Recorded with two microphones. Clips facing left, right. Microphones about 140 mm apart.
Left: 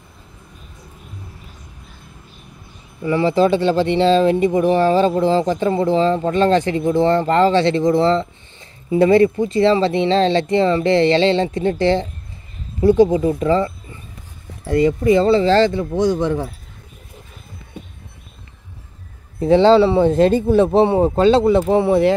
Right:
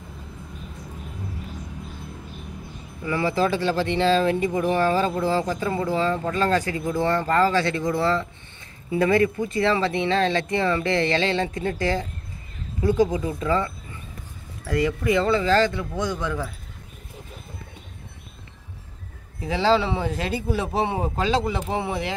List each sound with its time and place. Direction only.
3.1 s speech: 25° left (ahead or behind)
19.4 s speech: 30° left (ahead or behind)
21.5 s speech: 55° left (ahead or behind)